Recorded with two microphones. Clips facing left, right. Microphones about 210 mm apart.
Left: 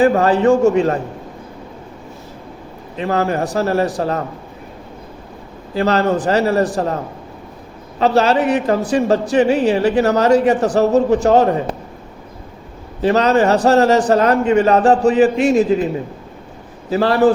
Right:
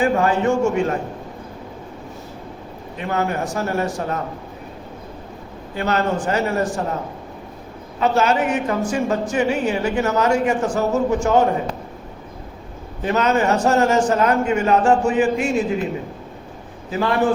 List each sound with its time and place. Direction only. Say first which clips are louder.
0.0 s a man's voice: left 5 dB; 35° left (ahead or behind)
3.1 s a man's voice: left 4 dB; 35° left (ahead or behind)
5.7 s a man's voice: left 5 dB; 35° left (ahead or behind)
7.9 s a man's voice: left 4 dB; 35° left (ahead or behind)
13.0 s a man's voice: left 5 dB; 35° left (ahead or behind)
16.9 s a man's voice: left 6 dB; 35° left (ahead or behind)